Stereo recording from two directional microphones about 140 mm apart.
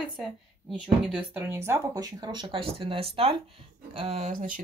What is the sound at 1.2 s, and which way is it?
Speech, 15° right (ahead or behind).